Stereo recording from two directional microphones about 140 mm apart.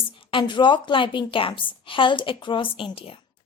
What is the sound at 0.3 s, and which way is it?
A woman's voice, 35° left (ahead or behind).